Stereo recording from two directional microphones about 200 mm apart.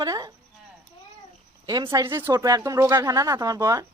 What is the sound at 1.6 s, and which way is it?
Speech, 20° right (ahead or behind).